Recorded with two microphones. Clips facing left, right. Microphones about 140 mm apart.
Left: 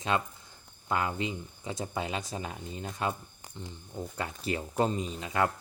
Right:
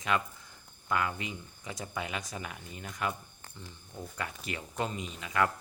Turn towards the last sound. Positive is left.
turn(degrees=30)  # may be behind; listen again after turning